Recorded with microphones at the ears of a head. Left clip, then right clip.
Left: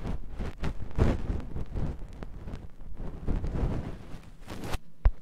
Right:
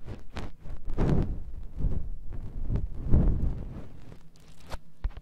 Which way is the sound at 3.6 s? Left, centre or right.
Left.